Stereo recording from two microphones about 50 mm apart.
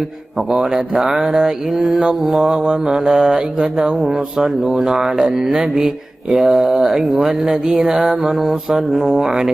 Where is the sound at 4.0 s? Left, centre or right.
Centre.